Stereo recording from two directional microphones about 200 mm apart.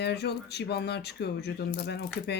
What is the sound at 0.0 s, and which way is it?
Speech, 55° left (ahead or behind).